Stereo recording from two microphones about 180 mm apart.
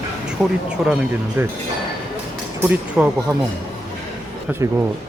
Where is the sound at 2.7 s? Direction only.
10° right (ahead or behind).